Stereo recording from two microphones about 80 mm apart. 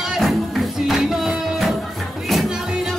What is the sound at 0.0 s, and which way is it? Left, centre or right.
Music, centre.